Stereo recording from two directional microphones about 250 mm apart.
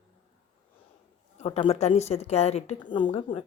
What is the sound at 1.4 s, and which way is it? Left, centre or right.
Speech, left.